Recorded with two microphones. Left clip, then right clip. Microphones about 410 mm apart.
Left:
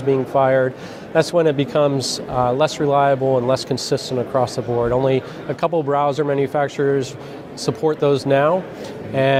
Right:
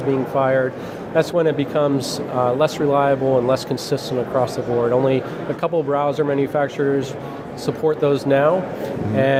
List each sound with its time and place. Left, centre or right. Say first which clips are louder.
0.1 s speech: left 3 dB; left